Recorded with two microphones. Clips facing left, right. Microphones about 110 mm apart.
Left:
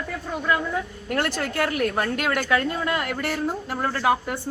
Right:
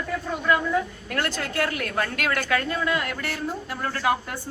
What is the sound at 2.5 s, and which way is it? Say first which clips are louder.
A woman's voice: left 1 dB; 30° left (ahead or behind).